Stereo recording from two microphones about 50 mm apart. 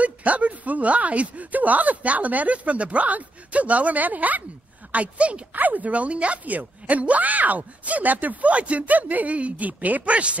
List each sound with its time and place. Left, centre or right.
0.0 s speech: right